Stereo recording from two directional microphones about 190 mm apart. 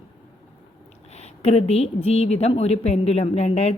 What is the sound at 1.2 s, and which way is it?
A woman's voice, 35° left (ahead or behind).